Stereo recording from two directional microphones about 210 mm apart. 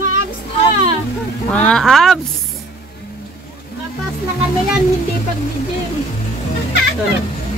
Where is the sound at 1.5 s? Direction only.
5° left (ahead or behind).